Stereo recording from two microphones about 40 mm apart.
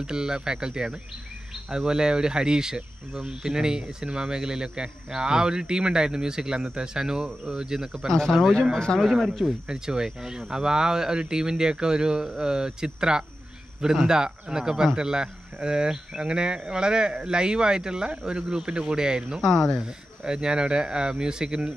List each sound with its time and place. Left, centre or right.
0.0 s speech: centre
8.3 s speech: centre
8.7 s a man's voice: centre
9.7 s speech: centre
19.4 s speech: centre
19.8 s speech: centre